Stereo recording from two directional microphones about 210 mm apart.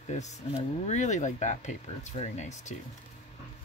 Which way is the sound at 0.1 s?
35° left (ahead or behind).